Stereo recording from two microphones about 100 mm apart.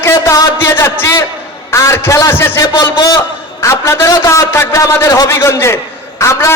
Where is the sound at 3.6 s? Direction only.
30° left (ahead or behind).